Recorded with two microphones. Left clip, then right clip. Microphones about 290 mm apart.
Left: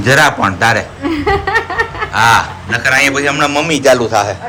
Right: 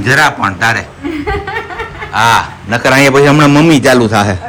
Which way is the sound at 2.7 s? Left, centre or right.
Centre.